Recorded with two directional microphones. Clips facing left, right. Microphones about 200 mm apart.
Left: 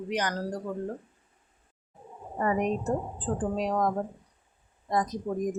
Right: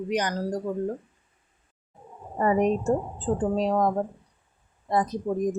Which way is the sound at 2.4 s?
30° right (ahead or behind).